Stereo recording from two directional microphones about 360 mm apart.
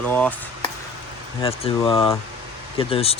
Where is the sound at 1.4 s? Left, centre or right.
Centre.